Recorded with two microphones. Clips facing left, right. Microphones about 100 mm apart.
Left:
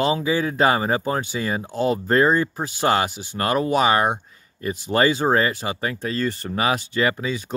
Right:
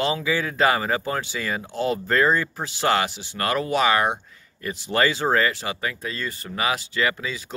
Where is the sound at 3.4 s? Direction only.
25° left (ahead or behind).